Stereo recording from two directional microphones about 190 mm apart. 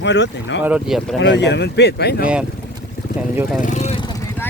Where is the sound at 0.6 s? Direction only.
5° right (ahead or behind).